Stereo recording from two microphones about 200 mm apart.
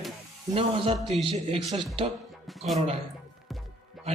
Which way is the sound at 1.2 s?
30° right (ahead or behind).